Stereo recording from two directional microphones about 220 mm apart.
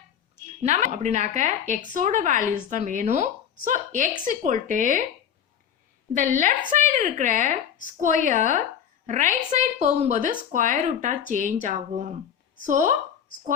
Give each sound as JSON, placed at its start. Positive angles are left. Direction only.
{"t": 0.6, "sound": "a woman's voice", "side_deg": -35}
{"t": 6.1, "sound": "a woman's voice", "side_deg": -35}